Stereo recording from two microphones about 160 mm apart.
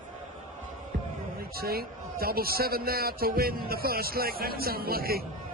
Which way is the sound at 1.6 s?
70° right (ahead or behind).